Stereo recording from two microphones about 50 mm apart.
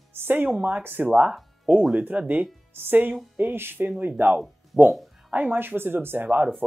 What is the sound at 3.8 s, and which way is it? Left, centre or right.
Speech, right.